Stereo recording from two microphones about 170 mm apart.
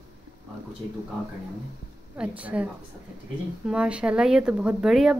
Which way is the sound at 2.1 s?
5° right (ahead or behind).